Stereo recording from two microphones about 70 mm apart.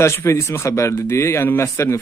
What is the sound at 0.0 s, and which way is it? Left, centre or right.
Speech, left.